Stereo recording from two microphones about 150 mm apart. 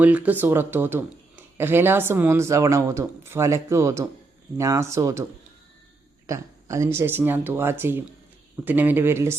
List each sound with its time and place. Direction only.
0.0 s speech: 10° right (ahead or behind)
6.2 s speech: 20° right (ahead or behind)